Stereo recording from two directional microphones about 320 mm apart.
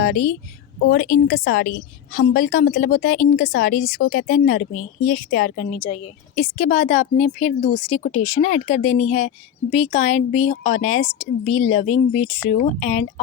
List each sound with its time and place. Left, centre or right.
0.0 s a woman's voice: left